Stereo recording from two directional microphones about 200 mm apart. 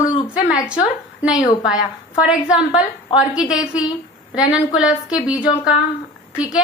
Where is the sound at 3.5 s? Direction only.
5° right (ahead or behind).